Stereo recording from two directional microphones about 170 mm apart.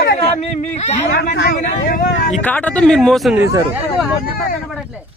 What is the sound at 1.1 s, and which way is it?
Speech, 75° left (ahead or behind).